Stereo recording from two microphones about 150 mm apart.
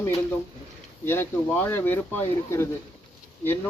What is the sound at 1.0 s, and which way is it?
Speech, 15° left (ahead or behind).